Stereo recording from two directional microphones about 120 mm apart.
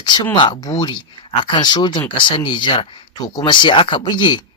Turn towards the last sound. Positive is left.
turn(degrees=40)  # may be behind; listen again after turning